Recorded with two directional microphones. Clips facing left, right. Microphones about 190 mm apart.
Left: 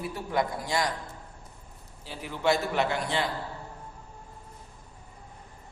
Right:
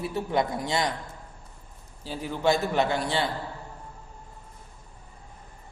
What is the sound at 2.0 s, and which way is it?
A man's voice, 30° right (ahead or behind).